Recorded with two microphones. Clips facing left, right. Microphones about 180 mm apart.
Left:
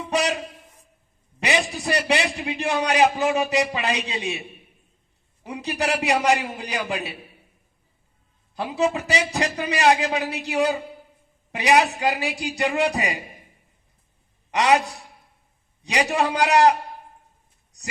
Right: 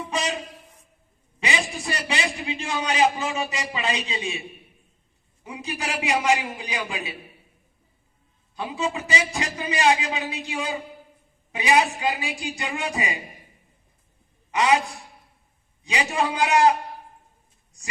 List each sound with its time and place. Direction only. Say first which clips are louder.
0.1 s speech: left 5 dB; 70° left (ahead or behind)
1.4 s a sound: left 4 dB; 65° left (ahead or behind)
1.8 s a man's voice: left 5 dB; 65° left (ahead or behind)
8.5 s a man's voice: left 5 dB; 70° left (ahead or behind)
14.5 s a man's voice: left 2 dB; 70° left (ahead or behind)
15.8 s a man's voice: left 3 dB; 70° left (ahead or behind)